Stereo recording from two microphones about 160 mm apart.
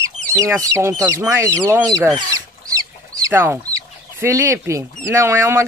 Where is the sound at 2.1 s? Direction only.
20° right (ahead or behind).